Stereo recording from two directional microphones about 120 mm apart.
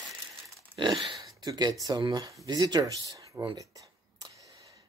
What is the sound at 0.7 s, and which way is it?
Speech, 40° right (ahead or behind).